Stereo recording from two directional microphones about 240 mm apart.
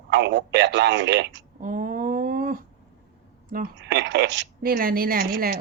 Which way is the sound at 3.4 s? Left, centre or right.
Right.